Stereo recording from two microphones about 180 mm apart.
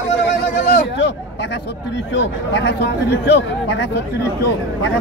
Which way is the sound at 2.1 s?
75° left (ahead or behind).